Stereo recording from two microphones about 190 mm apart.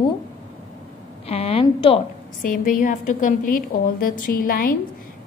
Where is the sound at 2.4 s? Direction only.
45° left (ahead or behind).